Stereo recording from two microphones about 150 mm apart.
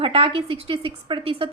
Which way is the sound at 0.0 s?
40° right (ahead or behind).